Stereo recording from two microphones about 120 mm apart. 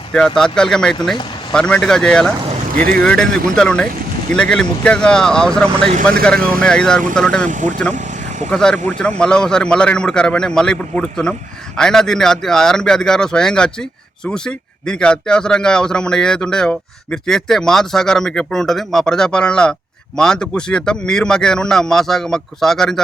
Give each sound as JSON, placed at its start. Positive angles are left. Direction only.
{"t": 0.1, "sound": "a man's voice", "side_deg": 5}
{"t": 7.4, "sound": "speech", "side_deg": -90}
{"t": 8.4, "sound": "a man's voice", "side_deg": 10}